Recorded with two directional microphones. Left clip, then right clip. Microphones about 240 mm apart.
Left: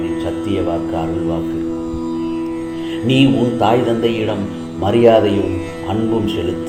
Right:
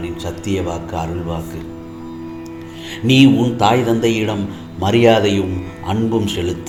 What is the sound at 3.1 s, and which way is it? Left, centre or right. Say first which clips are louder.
Speech: right 2 dB; right.